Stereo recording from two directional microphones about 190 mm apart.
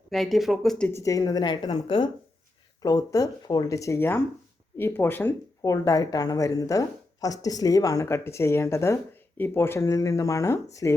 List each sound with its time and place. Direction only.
0.1 s speech: centre (ahead or behind)
0.9 s a woman's voice: 15° left (ahead or behind)